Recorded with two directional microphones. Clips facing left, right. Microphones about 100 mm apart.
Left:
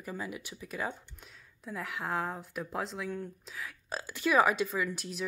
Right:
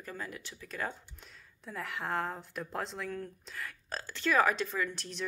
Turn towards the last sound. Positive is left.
turn(degrees=10)  # may be behind; listen again after turning